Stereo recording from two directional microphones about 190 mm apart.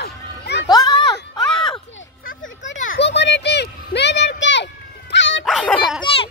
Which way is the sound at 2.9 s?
65° left (ahead or behind).